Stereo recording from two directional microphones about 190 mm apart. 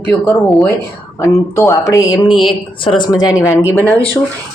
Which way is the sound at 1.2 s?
15° left (ahead or behind).